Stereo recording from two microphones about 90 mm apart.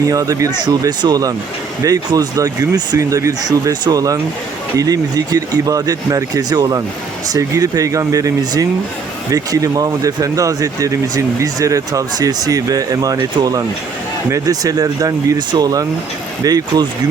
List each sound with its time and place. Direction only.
0.1 s speech: 40° right (ahead or behind)
0.6 s speech: 50° right (ahead or behind)